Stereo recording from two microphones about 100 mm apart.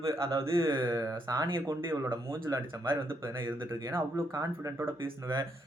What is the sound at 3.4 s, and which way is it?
Speech, 25° right (ahead or behind).